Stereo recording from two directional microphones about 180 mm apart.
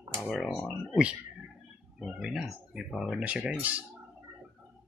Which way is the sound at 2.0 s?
5° right (ahead or behind).